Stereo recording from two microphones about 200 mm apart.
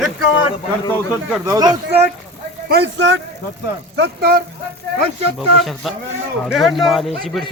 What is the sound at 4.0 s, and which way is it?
Speech, 50° right (ahead or behind).